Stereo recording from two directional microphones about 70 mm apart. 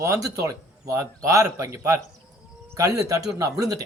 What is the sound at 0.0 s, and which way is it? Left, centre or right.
A man's voice, right.